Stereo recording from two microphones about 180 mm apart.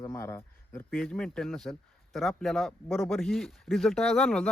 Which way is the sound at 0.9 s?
5° left (ahead or behind).